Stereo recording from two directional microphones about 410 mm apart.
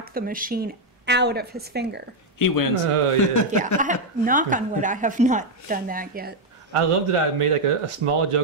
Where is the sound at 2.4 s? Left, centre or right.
Left.